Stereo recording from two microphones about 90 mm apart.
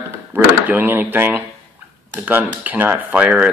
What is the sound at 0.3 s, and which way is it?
Speech, 25° right (ahead or behind).